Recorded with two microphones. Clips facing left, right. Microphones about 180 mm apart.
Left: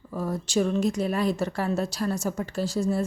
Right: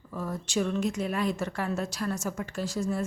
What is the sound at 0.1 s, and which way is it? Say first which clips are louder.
A woman's voice: left 4 dB; 35° left (ahead or behind).